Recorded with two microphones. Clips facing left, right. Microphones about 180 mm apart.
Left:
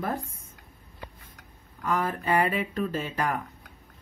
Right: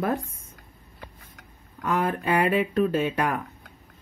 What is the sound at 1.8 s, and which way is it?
Speech, 75° right (ahead or behind).